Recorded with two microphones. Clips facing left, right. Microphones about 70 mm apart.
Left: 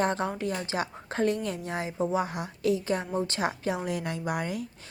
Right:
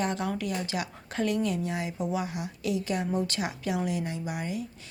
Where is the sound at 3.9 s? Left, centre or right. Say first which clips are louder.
Left 1 dB; left.